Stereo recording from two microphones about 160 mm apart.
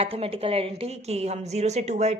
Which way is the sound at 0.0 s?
35° right (ahead or behind).